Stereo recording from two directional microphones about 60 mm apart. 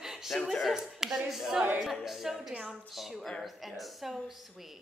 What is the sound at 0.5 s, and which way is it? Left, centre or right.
Speech, centre.